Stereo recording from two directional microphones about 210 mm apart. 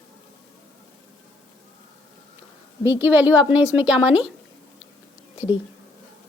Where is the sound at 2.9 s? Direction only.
10° right (ahead or behind).